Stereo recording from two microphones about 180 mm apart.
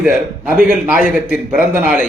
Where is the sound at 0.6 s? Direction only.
5° right (ahead or behind).